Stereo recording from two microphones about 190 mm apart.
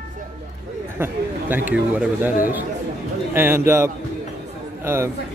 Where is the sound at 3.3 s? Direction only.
10° right (ahead or behind).